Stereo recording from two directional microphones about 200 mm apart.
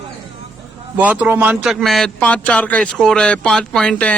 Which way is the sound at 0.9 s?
5° right (ahead or behind).